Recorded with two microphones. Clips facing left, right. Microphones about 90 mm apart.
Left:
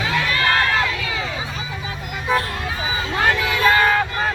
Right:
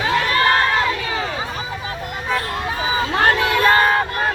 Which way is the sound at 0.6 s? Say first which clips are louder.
Right 2 dB; 25° right (ahead or behind).